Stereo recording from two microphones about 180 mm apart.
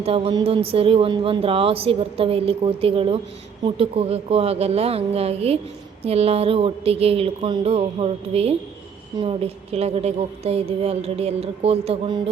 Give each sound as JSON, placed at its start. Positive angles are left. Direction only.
{"t": 0.0, "sound": "a woman's voice", "side_deg": -30}